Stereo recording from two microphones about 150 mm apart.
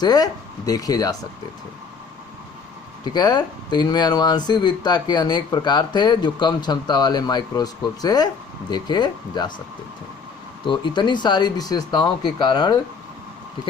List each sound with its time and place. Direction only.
0.0 s speech: 25° left (ahead or behind)
3.0 s speech: 30° left (ahead or behind)
10.7 s speech: 30° left (ahead or behind)